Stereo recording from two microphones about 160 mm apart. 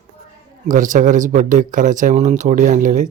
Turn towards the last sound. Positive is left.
turn(degrees=-55)  # may be behind; listen again after turning